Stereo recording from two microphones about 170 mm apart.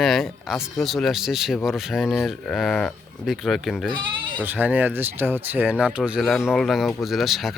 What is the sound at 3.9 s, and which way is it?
Bleat, 30° right (ahead or behind).